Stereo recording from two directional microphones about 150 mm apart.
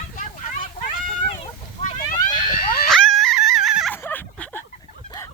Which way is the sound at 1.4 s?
60° left (ahead or behind).